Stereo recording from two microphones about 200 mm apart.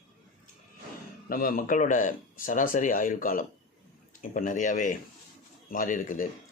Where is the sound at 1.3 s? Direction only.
45° left (ahead or behind).